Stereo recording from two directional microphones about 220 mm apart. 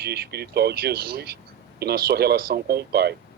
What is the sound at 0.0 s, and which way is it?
Speech, 50° right (ahead or behind).